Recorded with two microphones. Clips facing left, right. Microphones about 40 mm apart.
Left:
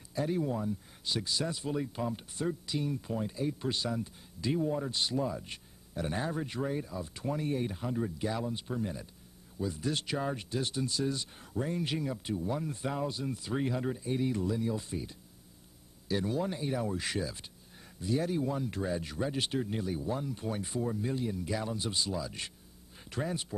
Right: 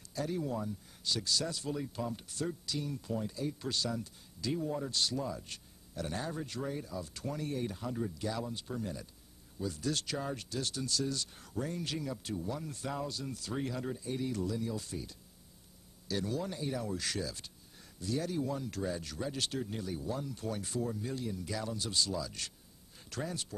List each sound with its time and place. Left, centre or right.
0.1 s a man's voice: left